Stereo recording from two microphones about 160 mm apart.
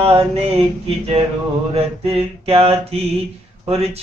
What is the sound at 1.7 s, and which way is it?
Speech, 40° right (ahead or behind).